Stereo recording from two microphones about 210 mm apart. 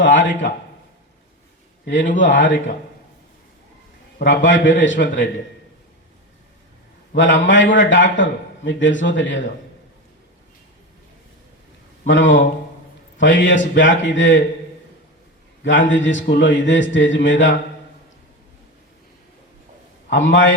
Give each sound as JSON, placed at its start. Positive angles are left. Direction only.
{"t": 0.0, "sound": "a man's voice", "side_deg": 60}
{"t": 1.8, "sound": "a man's voice", "side_deg": 60}
{"t": 4.2, "sound": "a man's voice", "side_deg": 60}
{"t": 7.1, "sound": "a man's voice", "side_deg": 60}
{"t": 12.0, "sound": "a man's voice", "side_deg": 60}
{"t": 15.6, "sound": "a man's voice", "side_deg": 65}
{"t": 20.1, "sound": "a man's voice", "side_deg": 60}